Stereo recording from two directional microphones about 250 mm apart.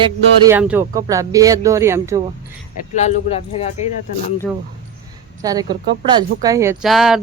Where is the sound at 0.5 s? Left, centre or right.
Centre.